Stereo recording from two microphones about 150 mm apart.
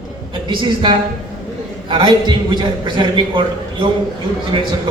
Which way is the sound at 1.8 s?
35° right (ahead or behind).